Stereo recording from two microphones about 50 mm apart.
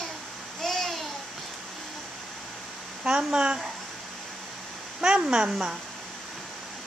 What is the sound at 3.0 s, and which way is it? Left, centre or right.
Speech, centre.